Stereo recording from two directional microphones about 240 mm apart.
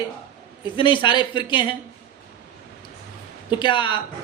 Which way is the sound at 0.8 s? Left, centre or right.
Centre.